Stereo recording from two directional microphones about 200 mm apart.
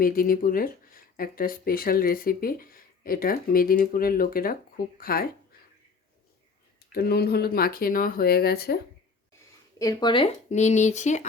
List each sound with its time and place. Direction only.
0.0 s speech: 45° left (ahead or behind)
6.7 s speech: 50° left (ahead or behind)
9.7 s speech: 15° left (ahead or behind); by 11.3 s 35° left (ahead or behind)